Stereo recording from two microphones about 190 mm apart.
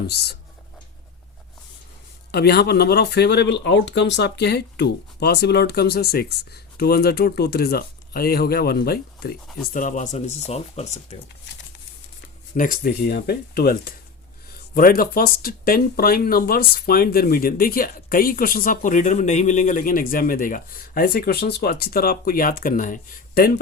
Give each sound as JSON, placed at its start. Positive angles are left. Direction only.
{"t": 0.1, "sound": "speech", "side_deg": 60}
{"t": 2.3, "sound": "speech", "side_deg": 55}
{"t": 9.7, "sound": "speech", "side_deg": 40}
{"t": 12.5, "sound": "speech", "side_deg": 45}